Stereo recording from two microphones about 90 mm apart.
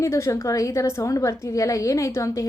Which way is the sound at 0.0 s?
30° left (ahead or behind).